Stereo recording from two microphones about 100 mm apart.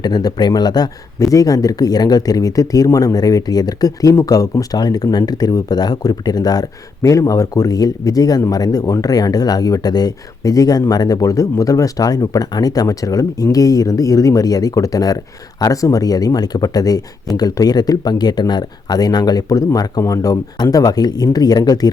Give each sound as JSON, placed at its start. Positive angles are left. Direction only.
{"t": 0.0, "sound": "speech", "side_deg": 45}